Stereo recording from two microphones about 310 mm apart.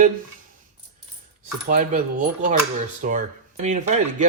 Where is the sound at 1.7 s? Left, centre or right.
Right.